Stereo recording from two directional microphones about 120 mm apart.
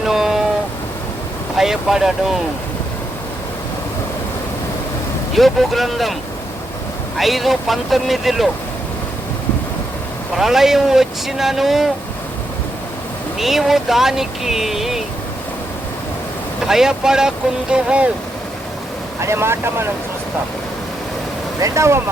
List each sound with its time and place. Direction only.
0.0 s a sound: 5° right (ahead or behind)
1.5 s speech: 5° right (ahead or behind)
5.3 s speech: centre (ahead or behind)
7.2 s speech: centre (ahead or behind)
10.3 s speech: 5° right (ahead or behind)
13.4 s speech: centre (ahead or behind)
16.6 s speech: 5° right (ahead or behind)
19.2 s speech: 20° right (ahead or behind)
21.6 s speech: 25° right (ahead or behind)